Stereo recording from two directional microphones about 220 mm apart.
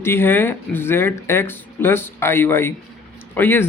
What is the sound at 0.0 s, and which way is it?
Speech, 10° left (ahead or behind).